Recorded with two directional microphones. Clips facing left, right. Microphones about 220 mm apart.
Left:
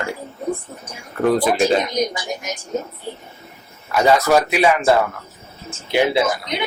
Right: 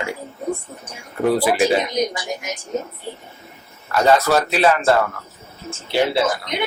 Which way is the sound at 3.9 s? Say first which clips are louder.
Left 1 dB; 10° left (ahead or behind).